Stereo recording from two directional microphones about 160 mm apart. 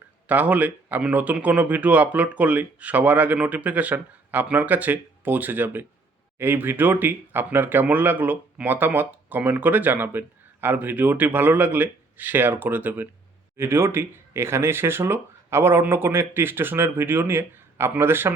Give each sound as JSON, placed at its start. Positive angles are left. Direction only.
{"t": 0.3, "sound": "speech", "side_deg": -10}